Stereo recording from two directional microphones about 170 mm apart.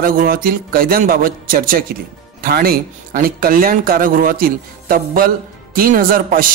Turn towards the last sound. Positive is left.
turn(degrees=-55)  # may be behind; listen again after turning